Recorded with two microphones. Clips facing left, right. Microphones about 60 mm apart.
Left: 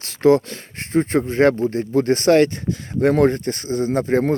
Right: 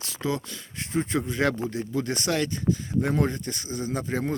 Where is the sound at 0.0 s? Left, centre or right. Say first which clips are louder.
Left 15 dB; left.